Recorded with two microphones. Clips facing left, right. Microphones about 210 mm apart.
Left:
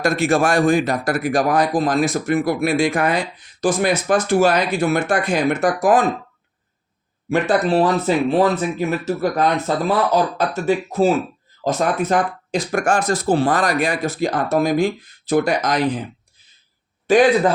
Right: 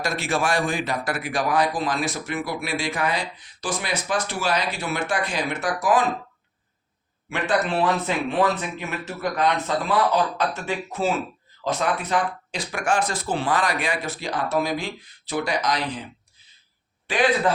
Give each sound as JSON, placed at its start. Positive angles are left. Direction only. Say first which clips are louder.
{"t": 0.0, "sound": "speech", "louder": "left 8 dB", "side_deg": 50}
{"t": 7.3, "sound": "speech", "louder": "left 7 dB", "side_deg": 40}
{"t": 17.1, "sound": "speech", "louder": "left 8 dB", "side_deg": 45}